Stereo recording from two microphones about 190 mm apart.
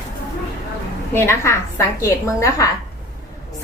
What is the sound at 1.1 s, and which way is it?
A woman's voice, 15° left (ahead or behind).